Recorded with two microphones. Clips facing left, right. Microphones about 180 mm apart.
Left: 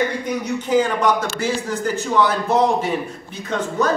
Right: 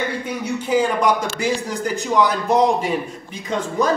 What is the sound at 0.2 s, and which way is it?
A man's voice, 10° right (ahead or behind).